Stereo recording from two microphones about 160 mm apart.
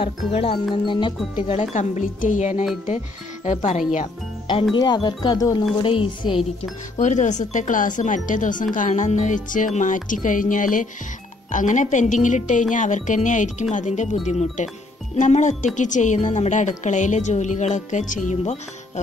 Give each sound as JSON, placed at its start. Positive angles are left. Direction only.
{"t": 0.0, "sound": "speech", "side_deg": 35}
{"t": 1.5, "sound": "a woman's voice", "side_deg": 45}
{"t": 4.7, "sound": "speech", "side_deg": 25}
{"t": 7.0, "sound": "a woman's voice", "side_deg": 50}